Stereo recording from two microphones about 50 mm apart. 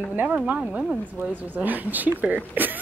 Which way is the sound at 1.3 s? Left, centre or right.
Right.